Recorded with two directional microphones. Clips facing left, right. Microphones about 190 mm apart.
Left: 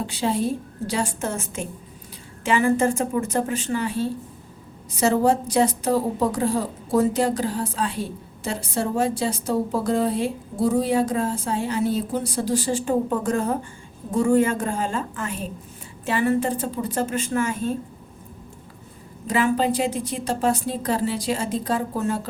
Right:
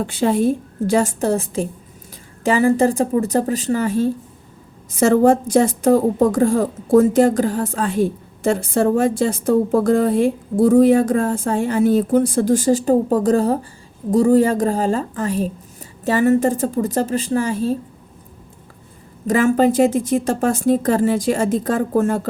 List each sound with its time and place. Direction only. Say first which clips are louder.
0.0 s a woman's voice: right 7 dB; 55° right (ahead or behind); by 17.7 s 35° right (ahead or behind)
19.3 s a woman's voice: right 6 dB; 45° right (ahead or behind)